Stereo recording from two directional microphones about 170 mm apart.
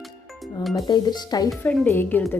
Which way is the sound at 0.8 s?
25° left (ahead or behind).